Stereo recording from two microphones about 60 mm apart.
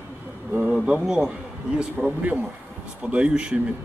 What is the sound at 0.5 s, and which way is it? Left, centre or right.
Speech, right.